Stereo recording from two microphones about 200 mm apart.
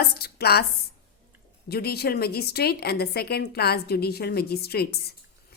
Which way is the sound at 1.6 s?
50° left (ahead or behind).